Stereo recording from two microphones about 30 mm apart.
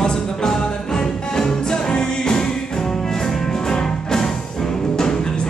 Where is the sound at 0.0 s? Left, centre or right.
Left.